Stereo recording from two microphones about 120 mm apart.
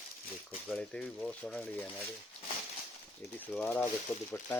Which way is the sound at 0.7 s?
5° left (ahead or behind).